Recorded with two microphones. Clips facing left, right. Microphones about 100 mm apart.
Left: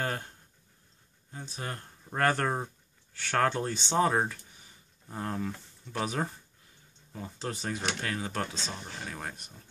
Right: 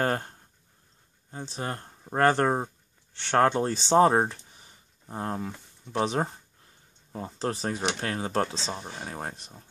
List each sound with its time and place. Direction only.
0.0 s speech: 45° right (ahead or behind)
1.3 s speech: 30° right (ahead or behind)